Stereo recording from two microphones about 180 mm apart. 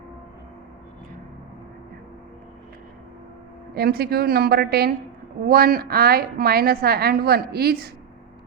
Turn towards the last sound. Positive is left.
turn(degrees=-60)  # may be behind; listen again after turning